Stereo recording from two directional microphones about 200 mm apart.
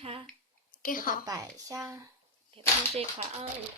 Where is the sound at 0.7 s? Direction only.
45° left (ahead or behind).